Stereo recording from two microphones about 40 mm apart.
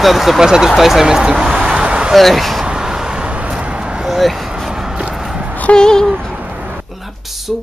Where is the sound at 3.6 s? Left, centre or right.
Right.